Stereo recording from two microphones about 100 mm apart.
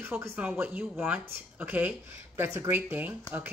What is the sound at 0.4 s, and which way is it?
Speech, 15° right (ahead or behind).